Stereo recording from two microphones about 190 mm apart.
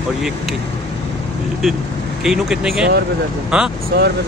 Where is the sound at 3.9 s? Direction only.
55° right (ahead or behind).